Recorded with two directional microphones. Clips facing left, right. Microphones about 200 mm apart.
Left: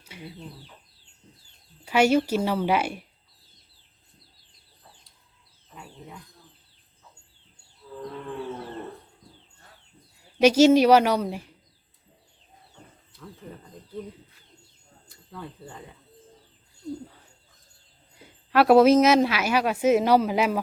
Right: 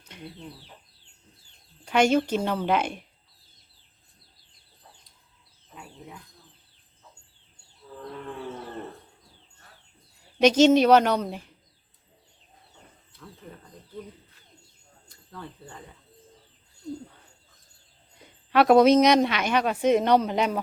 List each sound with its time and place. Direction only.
0.0 s chicken: 10° left (ahead or behind)
1.8 s speech: 5° left (ahead or behind)
10.4 s speech: 10° left (ahead or behind)
15.3 s speech: 5° left (ahead or behind)
18.2 s a woman's voice: 5° left (ahead or behind)